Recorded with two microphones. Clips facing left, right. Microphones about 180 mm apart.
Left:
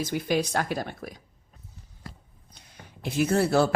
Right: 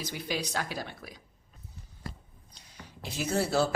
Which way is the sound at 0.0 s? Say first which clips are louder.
Left 8 dB; 50° left (ahead or behind).